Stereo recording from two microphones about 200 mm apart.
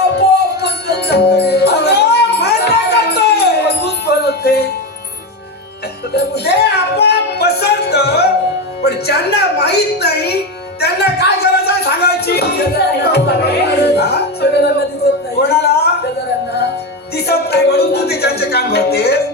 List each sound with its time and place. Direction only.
0.2 s music: 55° left (ahead or behind)
6.1 s a sound: 55° left (ahead or behind)
8.8 s music: 55° left (ahead or behind)
17.2 s music: 55° left (ahead or behind)